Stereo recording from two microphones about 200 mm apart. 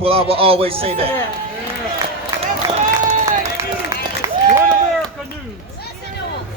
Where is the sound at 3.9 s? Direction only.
15° right (ahead or behind).